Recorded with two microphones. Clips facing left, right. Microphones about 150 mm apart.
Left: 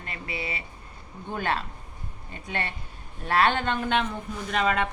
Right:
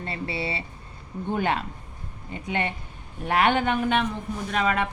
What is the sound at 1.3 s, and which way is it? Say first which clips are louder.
Speech: right 3 dB; 20° right (ahead or behind).